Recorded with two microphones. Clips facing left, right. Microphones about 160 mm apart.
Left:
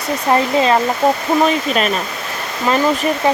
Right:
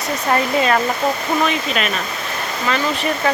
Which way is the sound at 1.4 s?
40° left (ahead or behind).